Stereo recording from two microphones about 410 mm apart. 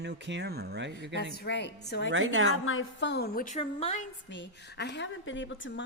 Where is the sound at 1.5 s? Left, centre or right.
Left.